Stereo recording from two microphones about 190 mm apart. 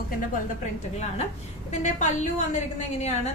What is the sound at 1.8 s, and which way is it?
Speech, 40° left (ahead or behind).